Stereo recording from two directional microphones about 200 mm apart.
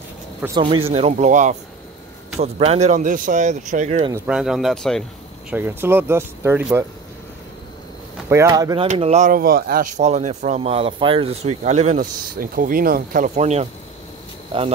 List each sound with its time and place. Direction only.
0.6 s speech: 25° right (ahead or behind)
4.3 s speech: 5° right (ahead or behind)
5.5 s speech: 10° right (ahead or behind)
8.3 s speech: 15° right (ahead or behind)
8.8 s speech: 30° right (ahead or behind)